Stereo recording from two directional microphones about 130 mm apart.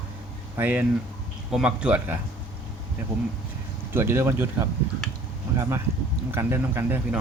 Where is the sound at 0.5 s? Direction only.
15° right (ahead or behind).